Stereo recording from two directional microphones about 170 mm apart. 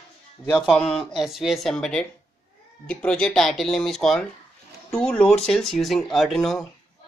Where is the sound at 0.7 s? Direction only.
Centre (ahead or behind).